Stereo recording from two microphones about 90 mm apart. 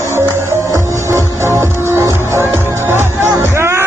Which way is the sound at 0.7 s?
35° right (ahead or behind).